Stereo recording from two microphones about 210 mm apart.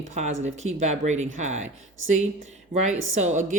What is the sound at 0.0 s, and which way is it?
Speech, 35° right (ahead or behind).